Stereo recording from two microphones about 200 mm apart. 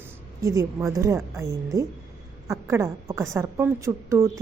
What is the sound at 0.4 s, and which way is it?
A woman's voice, 15° right (ahead or behind).